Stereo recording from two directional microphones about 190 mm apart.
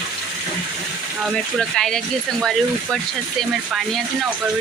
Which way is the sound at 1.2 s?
5° left (ahead or behind).